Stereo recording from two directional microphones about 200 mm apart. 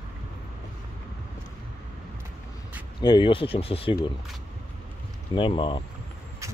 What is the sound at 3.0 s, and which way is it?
Speech, 25° left (ahead or behind).